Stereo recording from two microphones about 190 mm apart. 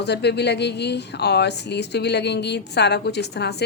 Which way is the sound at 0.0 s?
60° left (ahead or behind).